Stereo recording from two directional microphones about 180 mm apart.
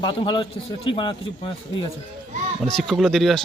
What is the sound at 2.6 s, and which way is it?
Speech, 5° left (ahead or behind).